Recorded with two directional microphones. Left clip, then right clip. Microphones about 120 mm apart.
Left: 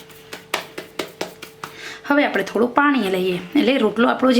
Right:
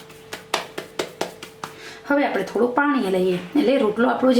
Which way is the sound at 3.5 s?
40° left (ahead or behind).